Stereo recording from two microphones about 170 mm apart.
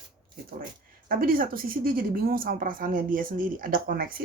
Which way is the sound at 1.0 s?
55° right (ahead or behind).